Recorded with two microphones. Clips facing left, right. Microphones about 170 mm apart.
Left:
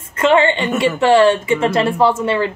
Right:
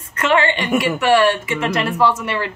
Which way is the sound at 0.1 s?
25° left (ahead or behind).